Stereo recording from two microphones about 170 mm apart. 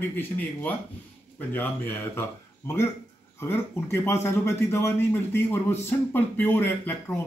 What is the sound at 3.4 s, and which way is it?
Speech, 15° left (ahead or behind).